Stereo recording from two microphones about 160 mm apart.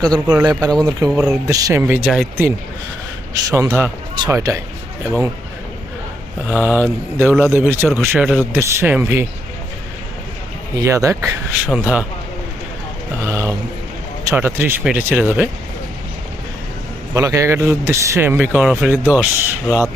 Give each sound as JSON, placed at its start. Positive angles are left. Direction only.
{"t": 0.0, "sound": "speech", "side_deg": -25}
{"t": 2.0, "sound": "speech", "side_deg": -5}
{"t": 3.5, "sound": "speech", "side_deg": -15}
{"t": 6.5, "sound": "speech", "side_deg": -10}
{"t": 10.8, "sound": "speech", "side_deg": -20}
{"t": 13.2, "sound": "speech", "side_deg": -15}
{"t": 17.2, "sound": "speech", "side_deg": -20}
{"t": 18.3, "sound": "speech", "side_deg": -5}